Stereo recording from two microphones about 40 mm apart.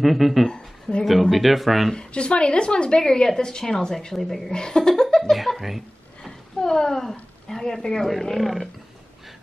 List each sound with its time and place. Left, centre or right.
0.0 s speech: centre
0.5 s a sound: left
1.3 s speech: centre
2.0 s a woman's voice: left
4.2 s speech: centre
4.5 s a woman's voice: centre
6.2 s speech: centre